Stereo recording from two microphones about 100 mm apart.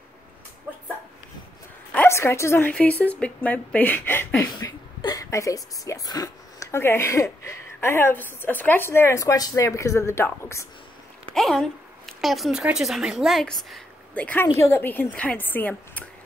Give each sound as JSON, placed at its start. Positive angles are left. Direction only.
{"t": 2.0, "sound": "a woman's voice", "side_deg": 30}
{"t": 2.7, "sound": "a woman's voice", "side_deg": 15}
{"t": 11.3, "sound": "a woman's voice", "side_deg": 5}
{"t": 14.1, "sound": "speech", "side_deg": 15}